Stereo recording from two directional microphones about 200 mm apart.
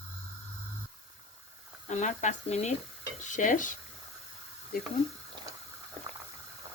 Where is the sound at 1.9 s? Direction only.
35° left (ahead or behind).